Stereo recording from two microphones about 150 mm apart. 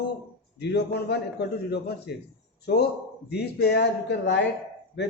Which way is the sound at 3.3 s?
90° left.